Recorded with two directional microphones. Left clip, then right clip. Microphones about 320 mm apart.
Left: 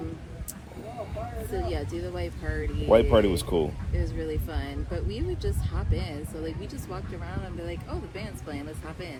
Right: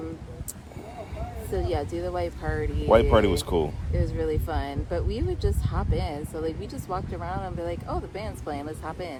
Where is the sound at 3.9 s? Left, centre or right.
Centre.